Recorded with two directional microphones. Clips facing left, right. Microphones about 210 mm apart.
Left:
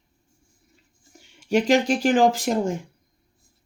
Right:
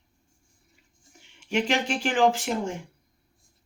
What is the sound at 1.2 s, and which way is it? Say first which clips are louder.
Speech: left 5 dB; 40° left (ahead or behind).